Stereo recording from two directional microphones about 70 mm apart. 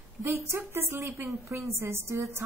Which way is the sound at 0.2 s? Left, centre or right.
Right.